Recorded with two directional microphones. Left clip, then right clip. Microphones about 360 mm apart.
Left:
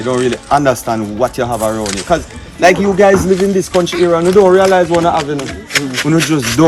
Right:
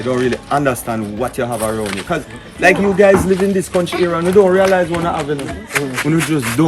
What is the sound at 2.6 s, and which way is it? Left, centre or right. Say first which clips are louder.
Speech: left 2 dB; centre.